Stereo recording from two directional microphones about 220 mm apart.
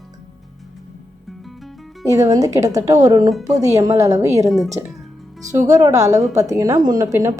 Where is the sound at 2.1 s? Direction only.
15° right (ahead or behind).